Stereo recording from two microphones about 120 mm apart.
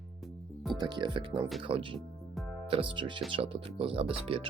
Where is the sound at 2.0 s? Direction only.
Centre (ahead or behind).